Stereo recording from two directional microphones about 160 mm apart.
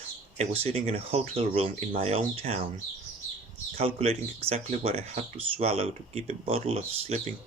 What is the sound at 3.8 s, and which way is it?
Speech, 40° right (ahead or behind).